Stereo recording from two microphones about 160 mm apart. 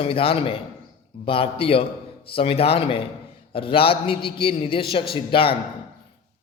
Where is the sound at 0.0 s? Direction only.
35° left (ahead or behind).